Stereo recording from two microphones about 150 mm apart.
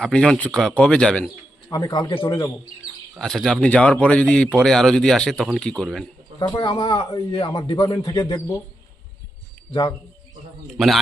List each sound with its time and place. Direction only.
0.0 s speech: 5° left (ahead or behind)
1.7 s a man's voice: 25° left (ahead or behind)
3.2 s speech: 5° left (ahead or behind)
6.5 s a man's voice: 30° left (ahead or behind)
10.7 s speech: centre (ahead or behind)